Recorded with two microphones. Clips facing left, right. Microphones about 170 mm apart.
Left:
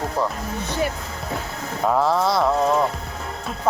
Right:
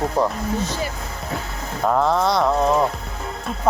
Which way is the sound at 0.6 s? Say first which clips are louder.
Left 2 dB; 60° left (ahead or behind).